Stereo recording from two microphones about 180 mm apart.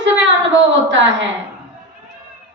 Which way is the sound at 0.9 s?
90° right.